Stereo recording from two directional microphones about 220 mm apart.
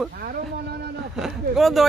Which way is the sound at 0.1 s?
45° right (ahead or behind).